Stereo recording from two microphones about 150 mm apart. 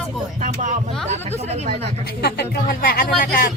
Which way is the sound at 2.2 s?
90° left.